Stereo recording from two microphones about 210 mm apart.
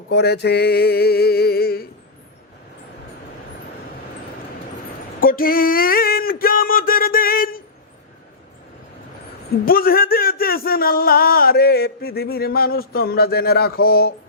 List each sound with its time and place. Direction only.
0.1 s speech: 50° left (ahead or behind)
5.2 s a sound: 45° left (ahead or behind)
9.6 s speech: 45° left (ahead or behind)